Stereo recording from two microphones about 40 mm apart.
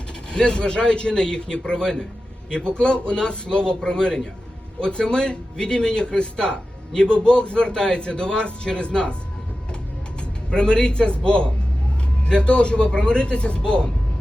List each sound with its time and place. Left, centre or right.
0.3 s speech: left
10.5 s speech: left